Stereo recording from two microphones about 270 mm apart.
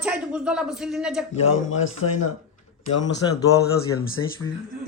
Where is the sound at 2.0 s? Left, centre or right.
Left.